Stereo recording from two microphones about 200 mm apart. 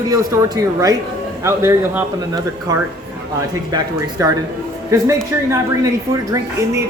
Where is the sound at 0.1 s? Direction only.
15° right (ahead or behind).